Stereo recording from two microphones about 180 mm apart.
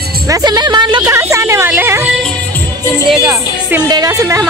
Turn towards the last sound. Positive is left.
turn(degrees=-15)  # may be behind; listen again after turning